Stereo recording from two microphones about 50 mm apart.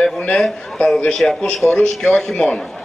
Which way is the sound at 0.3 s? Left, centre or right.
Centre.